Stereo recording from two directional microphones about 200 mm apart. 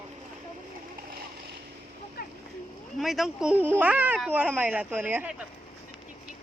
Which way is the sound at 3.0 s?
Centre (ahead or behind).